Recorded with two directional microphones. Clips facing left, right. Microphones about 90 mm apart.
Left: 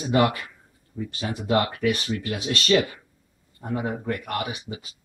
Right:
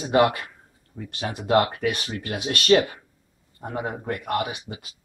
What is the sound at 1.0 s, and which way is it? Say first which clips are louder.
A man's voice: left 1 dB; 60° right (ahead or behind).